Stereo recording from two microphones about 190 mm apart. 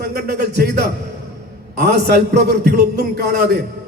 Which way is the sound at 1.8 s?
55° right (ahead or behind).